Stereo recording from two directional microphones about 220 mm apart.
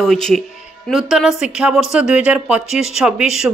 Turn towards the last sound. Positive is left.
turn(degrees=-5)  # may be behind; listen again after turning